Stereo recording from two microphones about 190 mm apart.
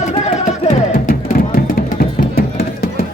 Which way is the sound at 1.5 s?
50° left (ahead or behind).